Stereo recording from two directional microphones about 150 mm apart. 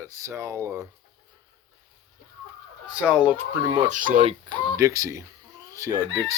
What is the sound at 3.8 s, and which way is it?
Speech, 55° right (ahead or behind).